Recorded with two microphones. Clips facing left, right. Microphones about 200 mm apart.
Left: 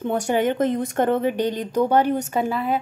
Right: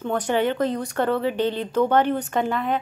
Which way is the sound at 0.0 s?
10° left (ahead or behind).